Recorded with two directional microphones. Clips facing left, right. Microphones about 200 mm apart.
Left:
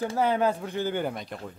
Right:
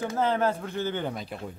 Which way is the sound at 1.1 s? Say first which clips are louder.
Right 1 dB; centre (ahead or behind).